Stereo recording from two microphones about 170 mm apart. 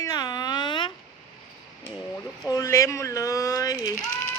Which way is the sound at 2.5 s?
20° left (ahead or behind).